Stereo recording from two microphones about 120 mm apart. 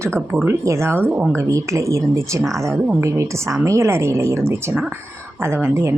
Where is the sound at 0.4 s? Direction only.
25° right (ahead or behind).